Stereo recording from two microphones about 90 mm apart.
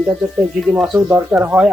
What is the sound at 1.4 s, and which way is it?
Speech, 15° right (ahead or behind).